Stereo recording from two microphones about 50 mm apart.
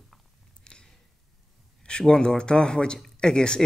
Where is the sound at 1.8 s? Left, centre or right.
Centre.